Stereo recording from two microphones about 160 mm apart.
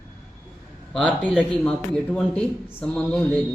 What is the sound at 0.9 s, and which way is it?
Speech, 5° left (ahead or behind).